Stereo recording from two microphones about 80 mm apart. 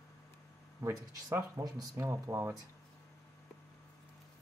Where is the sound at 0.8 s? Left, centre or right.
Right.